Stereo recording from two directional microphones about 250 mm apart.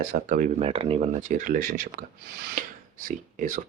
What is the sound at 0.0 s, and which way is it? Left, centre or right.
Speech, right.